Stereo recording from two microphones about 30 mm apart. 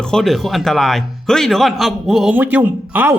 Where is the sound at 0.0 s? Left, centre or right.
Centre.